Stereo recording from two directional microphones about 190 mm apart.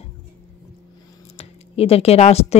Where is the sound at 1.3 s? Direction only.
30° left (ahead or behind).